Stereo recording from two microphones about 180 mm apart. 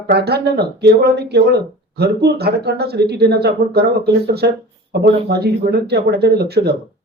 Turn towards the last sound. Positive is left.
turn(degrees=-60)  # may be behind; listen again after turning